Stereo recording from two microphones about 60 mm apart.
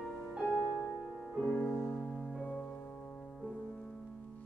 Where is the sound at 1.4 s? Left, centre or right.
Centre.